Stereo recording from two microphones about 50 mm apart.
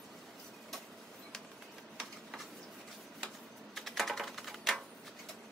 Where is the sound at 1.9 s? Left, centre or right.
Centre.